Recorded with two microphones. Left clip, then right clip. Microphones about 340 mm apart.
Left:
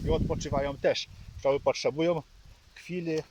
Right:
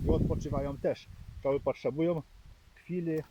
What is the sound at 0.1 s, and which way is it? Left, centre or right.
Speech, left.